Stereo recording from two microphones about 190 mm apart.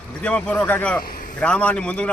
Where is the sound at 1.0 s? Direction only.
50° left (ahead or behind).